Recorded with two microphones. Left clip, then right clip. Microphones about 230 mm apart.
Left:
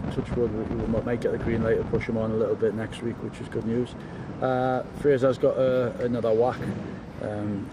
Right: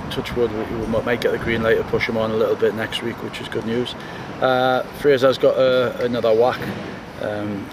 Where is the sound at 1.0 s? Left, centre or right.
Centre.